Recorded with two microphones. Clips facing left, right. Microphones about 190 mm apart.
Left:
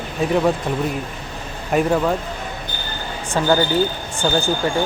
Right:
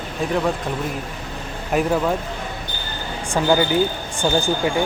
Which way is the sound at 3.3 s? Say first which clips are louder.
Even; 10° right (ahead or behind).